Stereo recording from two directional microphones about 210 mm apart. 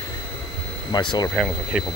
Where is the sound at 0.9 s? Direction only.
20° left (ahead or behind).